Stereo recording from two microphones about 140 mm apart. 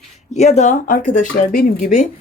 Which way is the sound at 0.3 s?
55° left (ahead or behind).